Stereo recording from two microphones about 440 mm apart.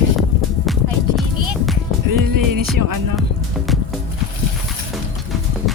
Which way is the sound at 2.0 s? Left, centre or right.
Right.